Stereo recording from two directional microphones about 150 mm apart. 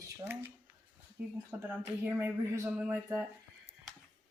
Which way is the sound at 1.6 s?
10° right (ahead or behind).